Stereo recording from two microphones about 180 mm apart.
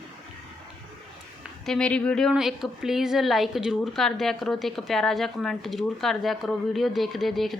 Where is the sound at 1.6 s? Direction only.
5° left (ahead or behind).